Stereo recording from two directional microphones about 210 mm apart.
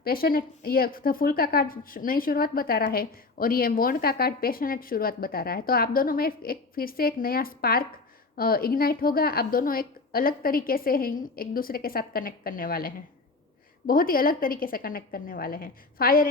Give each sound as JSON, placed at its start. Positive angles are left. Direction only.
{"t": 0.0, "sound": "a woman's voice", "side_deg": 45}